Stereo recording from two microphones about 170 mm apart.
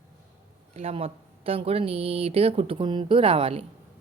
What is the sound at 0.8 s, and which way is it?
A woman's voice, 35° right (ahead or behind).